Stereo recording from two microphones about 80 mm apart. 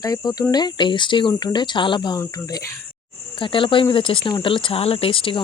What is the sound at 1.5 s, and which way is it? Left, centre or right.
Speech, left.